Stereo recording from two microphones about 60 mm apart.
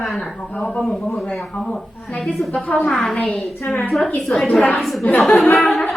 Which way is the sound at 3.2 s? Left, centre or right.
Centre.